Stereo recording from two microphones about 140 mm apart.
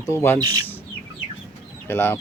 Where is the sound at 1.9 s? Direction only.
15° left (ahead or behind).